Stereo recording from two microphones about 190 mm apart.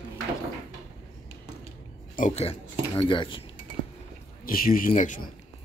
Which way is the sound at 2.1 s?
40° left (ahead or behind).